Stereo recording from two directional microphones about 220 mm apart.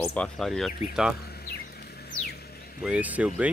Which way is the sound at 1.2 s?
45° left (ahead or behind).